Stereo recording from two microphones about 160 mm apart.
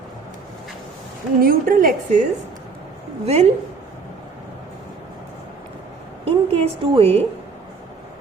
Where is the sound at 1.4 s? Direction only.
65° right (ahead or behind).